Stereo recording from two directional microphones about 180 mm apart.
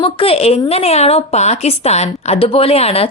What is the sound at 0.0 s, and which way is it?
A woman's voice, 30° left (ahead or behind).